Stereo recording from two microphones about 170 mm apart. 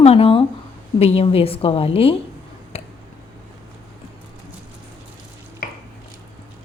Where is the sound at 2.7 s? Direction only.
35° left (ahead or behind).